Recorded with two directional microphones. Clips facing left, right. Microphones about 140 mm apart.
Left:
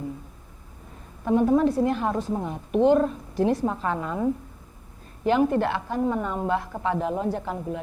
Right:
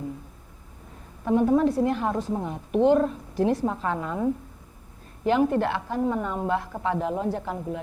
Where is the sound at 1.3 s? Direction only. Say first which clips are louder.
Left 1 dB; 20° left (ahead or behind).